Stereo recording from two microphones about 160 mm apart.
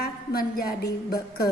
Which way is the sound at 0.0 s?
70° left (ahead or behind).